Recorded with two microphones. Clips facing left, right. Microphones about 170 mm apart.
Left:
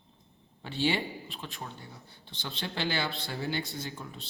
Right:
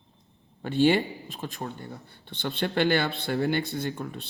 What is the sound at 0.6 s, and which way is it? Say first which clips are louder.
Speech: right 8 dB; 50° right (ahead or behind).